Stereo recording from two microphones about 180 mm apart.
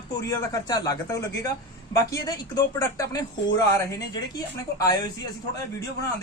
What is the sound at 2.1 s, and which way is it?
A man's voice, 20° left (ahead or behind).